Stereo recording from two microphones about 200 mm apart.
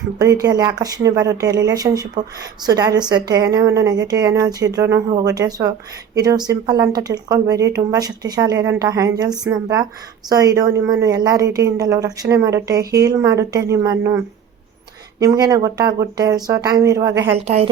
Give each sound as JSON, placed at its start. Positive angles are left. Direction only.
{"t": 0.2, "sound": "speech", "side_deg": -20}
{"t": 15.2, "sound": "speech", "side_deg": -20}
{"t": 17.3, "sound": "a woman's voice", "side_deg": -30}